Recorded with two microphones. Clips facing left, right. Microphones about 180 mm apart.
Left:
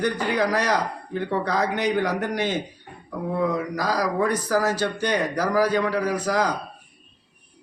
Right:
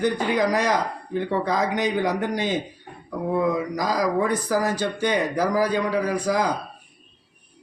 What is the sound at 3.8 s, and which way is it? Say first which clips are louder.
Speech: even; 15° right (ahead or behind).